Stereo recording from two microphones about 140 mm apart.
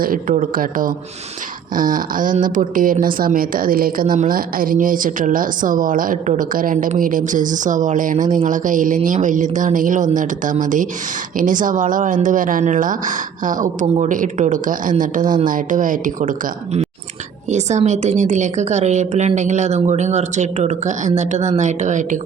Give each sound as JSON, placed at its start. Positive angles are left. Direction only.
{"t": 0.0, "sound": "speech", "side_deg": -85}
{"t": 1.7, "sound": "speech", "side_deg": -75}
{"t": 17.5, "sound": "a woman's voice", "side_deg": -55}